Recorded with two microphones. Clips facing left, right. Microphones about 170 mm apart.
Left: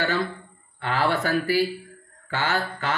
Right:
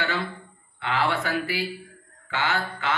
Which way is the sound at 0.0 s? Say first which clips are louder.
Left 4 dB; 40° left (ahead or behind).